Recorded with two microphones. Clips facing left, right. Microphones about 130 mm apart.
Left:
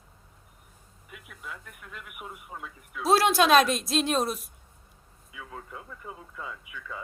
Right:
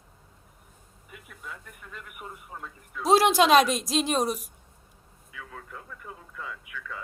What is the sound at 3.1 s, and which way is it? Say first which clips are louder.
A woman's voice: right 1 dB; 15° right (ahead or behind).